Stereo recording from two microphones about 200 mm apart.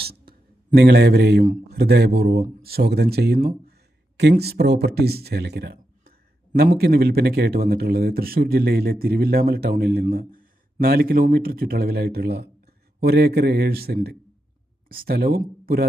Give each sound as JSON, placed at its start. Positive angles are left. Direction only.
{"t": 0.8, "sound": "speech", "side_deg": -55}